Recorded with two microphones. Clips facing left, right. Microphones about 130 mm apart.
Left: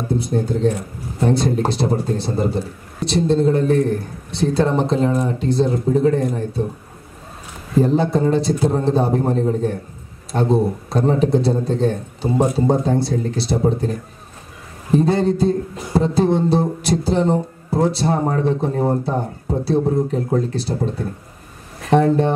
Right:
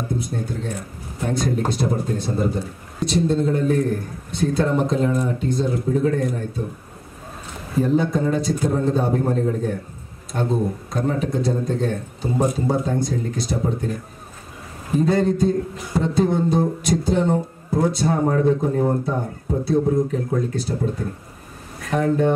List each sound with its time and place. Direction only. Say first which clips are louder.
0.3 s speech: left 9 dB; 30° left (ahead or behind)
7.8 s speech: left 2 dB; 30° left (ahead or behind)
15.0 s speech: left 2 dB; 30° left (ahead or behind)
21.9 s speech: left 4 dB; 30° left (ahead or behind)